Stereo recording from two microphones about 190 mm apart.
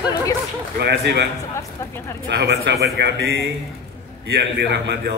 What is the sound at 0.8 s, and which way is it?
Speech, 55° right (ahead or behind).